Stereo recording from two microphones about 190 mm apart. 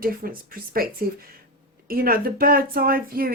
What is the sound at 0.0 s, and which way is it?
Speech, 50° right (ahead or behind).